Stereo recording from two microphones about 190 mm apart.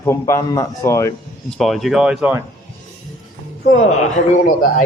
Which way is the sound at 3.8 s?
45° left (ahead or behind).